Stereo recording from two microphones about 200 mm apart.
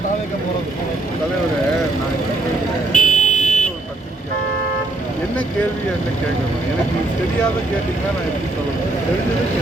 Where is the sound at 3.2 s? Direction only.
35° left (ahead or behind).